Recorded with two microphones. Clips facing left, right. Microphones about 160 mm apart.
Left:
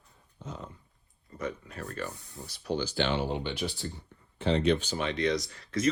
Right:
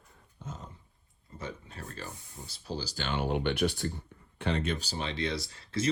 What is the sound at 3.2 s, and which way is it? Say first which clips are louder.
Speech: right 3 dB; 65° right (ahead or behind).